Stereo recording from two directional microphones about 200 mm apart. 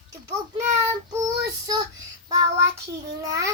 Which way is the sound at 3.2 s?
15° right (ahead or behind).